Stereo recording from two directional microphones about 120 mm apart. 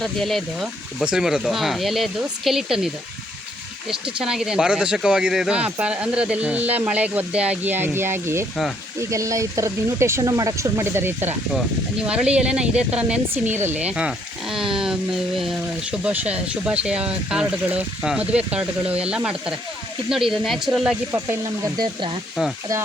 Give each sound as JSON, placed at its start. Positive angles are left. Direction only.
{"t": 0.0, "sound": "speech", "side_deg": 0}
{"t": 21.1, "sound": "speech", "side_deg": -25}
{"t": 22.4, "sound": "speech", "side_deg": -5}